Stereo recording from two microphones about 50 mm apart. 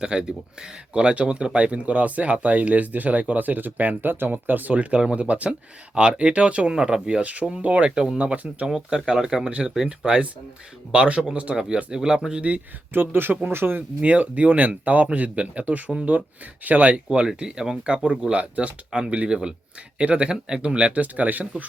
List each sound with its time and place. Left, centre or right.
0.0 s speech: centre
7.2 s speech: right
12.9 s speech: right
14.0 s speech: right
17.1 s speech: centre; by 21.4 s right